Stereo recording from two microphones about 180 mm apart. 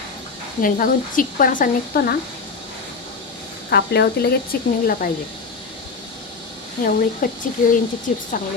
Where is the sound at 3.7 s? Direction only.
60° left (ahead or behind).